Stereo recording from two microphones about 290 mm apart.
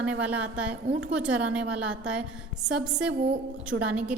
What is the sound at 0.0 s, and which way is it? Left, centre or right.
A woman's voice, centre.